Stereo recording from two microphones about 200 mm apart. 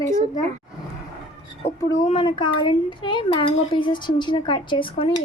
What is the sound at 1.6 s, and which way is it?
Speech, 30° left (ahead or behind).